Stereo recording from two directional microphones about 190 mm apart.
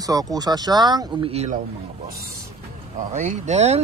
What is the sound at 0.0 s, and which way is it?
Speech, 20° right (ahead or behind).